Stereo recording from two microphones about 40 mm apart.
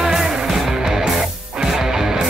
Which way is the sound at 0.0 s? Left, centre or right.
Centre.